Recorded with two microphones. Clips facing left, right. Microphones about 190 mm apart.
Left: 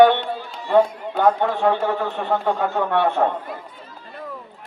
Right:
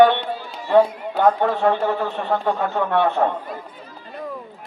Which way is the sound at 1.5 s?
15° left (ahead or behind).